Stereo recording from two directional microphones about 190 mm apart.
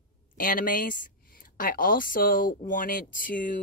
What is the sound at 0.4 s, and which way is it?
Speech, 45° left (ahead or behind).